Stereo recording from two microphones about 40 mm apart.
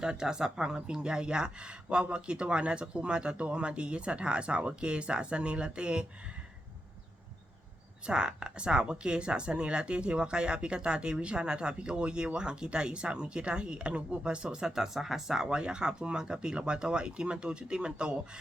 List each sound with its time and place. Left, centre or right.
0.0 s speech: centre
8.0 s speech: right
14.9 s speech: centre